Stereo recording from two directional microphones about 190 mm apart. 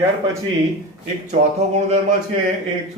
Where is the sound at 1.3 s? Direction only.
35° right (ahead or behind).